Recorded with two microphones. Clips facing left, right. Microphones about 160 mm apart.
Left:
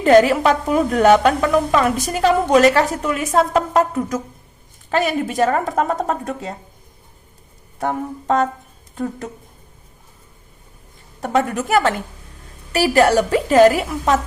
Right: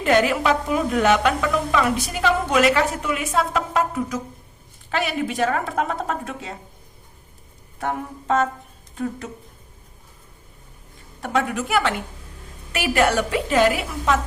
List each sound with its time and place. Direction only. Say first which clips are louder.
0.0 s a woman's voice: left 6 dB; 40° left (ahead or behind)
9.0 s a woman's voice: left 2 dB; 45° left (ahead or behind)
11.2 s a woman's voice: left 4 dB; 45° left (ahead or behind)